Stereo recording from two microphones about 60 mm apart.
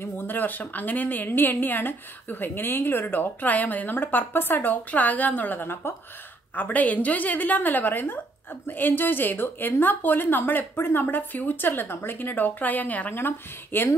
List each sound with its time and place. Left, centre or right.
0.0 s a woman's voice: left
6.5 s a woman's voice: left